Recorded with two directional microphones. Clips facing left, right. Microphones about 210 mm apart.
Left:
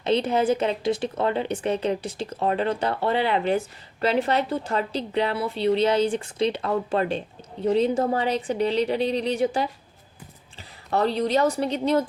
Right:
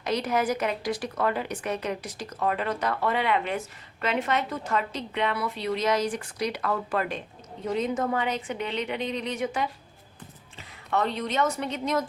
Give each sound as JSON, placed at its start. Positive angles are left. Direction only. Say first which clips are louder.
{"t": 0.0, "sound": "a woman's voice", "louder": "left 5 dB", "side_deg": 25}